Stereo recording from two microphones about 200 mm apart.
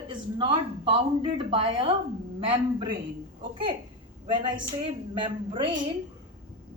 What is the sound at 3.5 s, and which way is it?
Speech, 25° right (ahead or behind).